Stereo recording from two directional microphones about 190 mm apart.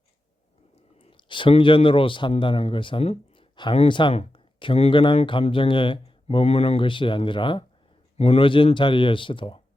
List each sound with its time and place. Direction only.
0.9 s speech: 25° left (ahead or behind)